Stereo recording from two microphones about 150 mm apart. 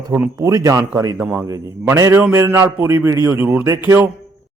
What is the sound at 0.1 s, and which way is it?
Speech, 20° right (ahead or behind).